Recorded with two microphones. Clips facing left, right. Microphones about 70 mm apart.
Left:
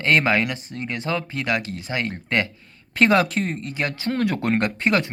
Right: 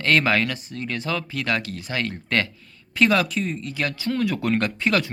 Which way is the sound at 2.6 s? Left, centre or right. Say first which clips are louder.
Left 1 dB; left.